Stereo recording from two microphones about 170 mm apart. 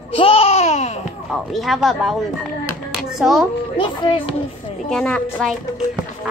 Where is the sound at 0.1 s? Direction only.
35° left (ahead or behind).